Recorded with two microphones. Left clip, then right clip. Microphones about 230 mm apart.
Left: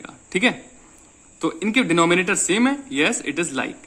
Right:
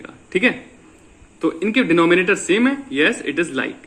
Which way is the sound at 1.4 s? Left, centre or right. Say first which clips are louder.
Right 2 dB; left.